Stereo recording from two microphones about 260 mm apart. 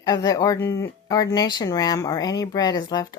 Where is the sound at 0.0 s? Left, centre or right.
Centre.